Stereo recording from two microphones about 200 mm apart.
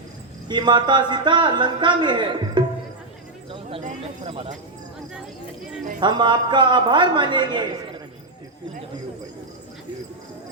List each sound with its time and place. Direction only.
0.4 s a man's voice: 20° right (ahead or behind)
6.0 s a man's voice: 25° right (ahead or behind)